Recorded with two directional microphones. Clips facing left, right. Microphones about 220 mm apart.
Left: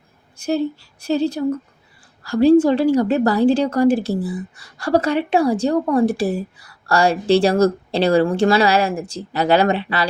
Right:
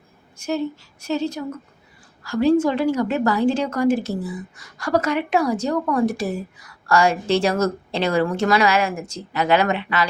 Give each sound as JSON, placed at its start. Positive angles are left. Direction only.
{"t": 0.3, "sound": "a woman's voice", "side_deg": 35}